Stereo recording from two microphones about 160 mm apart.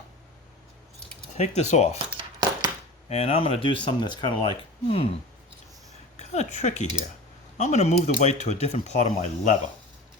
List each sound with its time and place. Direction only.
1.4 s speech: 45° left (ahead or behind)
2.1 s a sound: 25° right (ahead or behind)
3.1 s speech: 40° left (ahead or behind)
6.1 s a woman's voice: 45° left (ahead or behind)